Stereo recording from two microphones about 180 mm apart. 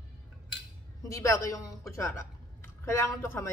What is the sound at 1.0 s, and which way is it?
A woman's voice, 15° left (ahead or behind).